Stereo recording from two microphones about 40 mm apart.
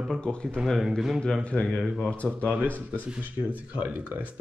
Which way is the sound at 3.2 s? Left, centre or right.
Right.